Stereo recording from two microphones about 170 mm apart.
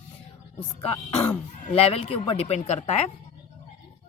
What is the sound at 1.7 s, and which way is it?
A woman's voice, 35° left (ahead or behind).